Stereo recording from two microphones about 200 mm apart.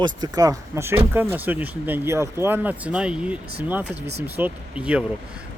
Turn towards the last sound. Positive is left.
turn(degrees=-5)  # may be behind; listen again after turning